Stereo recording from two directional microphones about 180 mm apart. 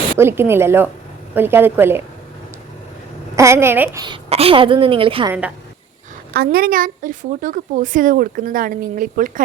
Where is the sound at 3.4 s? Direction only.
15° right (ahead or behind).